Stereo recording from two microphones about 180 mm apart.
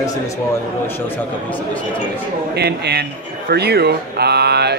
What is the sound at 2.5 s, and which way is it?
Speech, 65° right (ahead or behind).